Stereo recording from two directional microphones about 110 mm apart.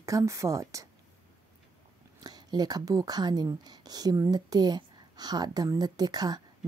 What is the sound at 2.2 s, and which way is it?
Speech, 40° right (ahead or behind).